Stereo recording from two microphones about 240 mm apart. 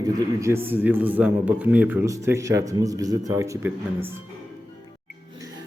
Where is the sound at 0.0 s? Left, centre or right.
Centre.